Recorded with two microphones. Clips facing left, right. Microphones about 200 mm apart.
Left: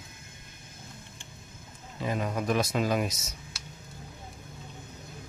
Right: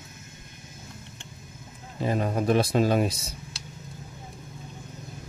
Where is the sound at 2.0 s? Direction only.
35° right (ahead or behind).